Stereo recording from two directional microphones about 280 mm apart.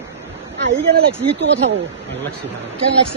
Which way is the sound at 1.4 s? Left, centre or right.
Right.